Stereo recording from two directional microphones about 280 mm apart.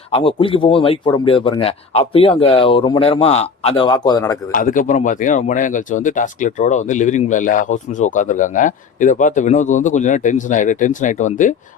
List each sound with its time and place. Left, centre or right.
0.1 s speech: centre
4.5 s speech: left